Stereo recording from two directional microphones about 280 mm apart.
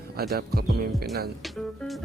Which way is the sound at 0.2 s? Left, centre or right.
Right.